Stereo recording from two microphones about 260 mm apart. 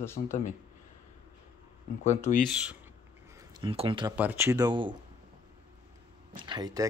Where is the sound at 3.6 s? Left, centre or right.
Centre.